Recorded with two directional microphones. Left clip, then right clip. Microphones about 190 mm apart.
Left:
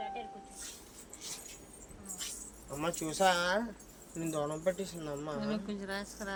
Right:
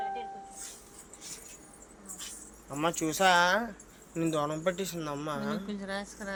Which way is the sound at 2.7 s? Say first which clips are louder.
Right 4 dB; 30° right (ahead or behind).